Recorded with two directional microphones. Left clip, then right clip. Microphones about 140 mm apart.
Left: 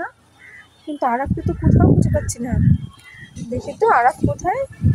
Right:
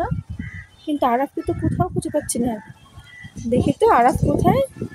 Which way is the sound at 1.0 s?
45° right (ahead or behind).